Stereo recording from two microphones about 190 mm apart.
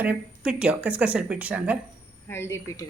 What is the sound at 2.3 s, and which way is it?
Speech, 15° left (ahead or behind).